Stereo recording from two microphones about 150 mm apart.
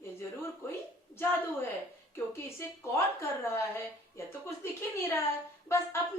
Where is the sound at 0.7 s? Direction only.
15° left (ahead or behind).